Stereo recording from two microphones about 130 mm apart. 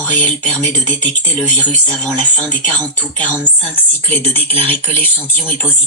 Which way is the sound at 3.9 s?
15° left (ahead or behind).